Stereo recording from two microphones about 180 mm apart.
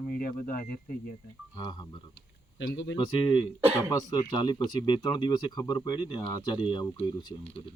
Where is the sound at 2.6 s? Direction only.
85° left.